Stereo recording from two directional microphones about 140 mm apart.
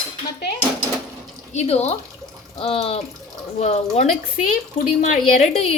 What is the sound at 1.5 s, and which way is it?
Speech, 50° left (ahead or behind).